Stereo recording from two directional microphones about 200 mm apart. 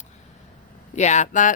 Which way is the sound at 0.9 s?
35° left (ahead or behind).